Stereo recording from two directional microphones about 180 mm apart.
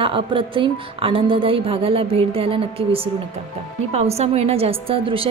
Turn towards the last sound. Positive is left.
turn(degrees=-30)  # may be behind; listen again after turning